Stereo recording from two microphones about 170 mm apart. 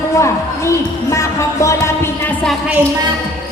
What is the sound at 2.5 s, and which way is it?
Speech, 10° right (ahead or behind).